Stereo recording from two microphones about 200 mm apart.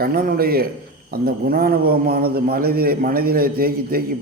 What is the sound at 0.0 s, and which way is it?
A man's voice, 50° right (ahead or behind).